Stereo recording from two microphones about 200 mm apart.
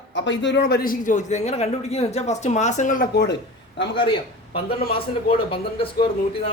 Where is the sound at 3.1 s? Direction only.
55° left (ahead or behind).